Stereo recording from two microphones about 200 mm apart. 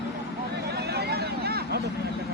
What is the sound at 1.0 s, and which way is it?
Vehicle, 55° right (ahead or behind).